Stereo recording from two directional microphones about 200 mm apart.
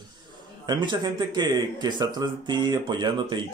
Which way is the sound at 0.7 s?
20° right (ahead or behind).